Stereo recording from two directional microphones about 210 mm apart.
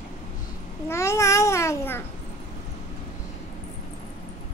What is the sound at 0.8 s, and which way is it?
Babbling, 15° left (ahead or behind).